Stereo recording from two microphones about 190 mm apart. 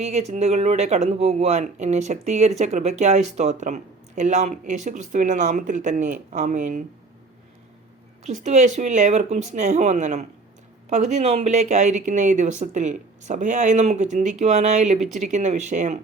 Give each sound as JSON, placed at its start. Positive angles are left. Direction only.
{"t": 0.0, "sound": "speech", "side_deg": -35}
{"t": 8.2, "sound": "speech", "side_deg": -35}